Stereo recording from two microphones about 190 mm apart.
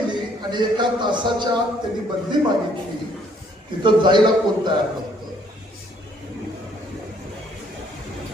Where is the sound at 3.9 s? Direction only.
25° right (ahead or behind).